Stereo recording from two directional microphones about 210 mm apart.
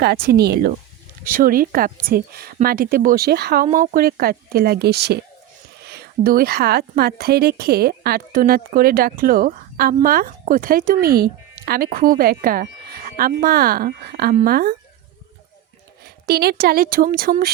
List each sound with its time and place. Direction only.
0.0 s speech: 50° right (ahead or behind)
16.0 s speech: 50° right (ahead or behind)